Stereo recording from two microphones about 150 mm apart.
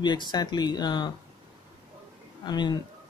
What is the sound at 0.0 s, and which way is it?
Speech, 30° left (ahead or behind).